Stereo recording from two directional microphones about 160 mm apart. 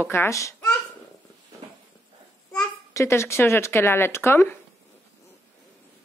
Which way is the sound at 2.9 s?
15° left (ahead or behind).